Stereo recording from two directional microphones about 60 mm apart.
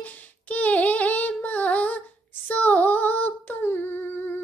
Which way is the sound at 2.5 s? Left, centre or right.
Left.